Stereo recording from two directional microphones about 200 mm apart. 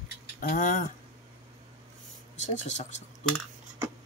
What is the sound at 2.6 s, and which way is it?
Speech, 35° left (ahead or behind).